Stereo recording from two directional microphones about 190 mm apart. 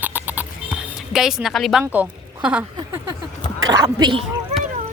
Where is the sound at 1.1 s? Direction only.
Centre (ahead or behind).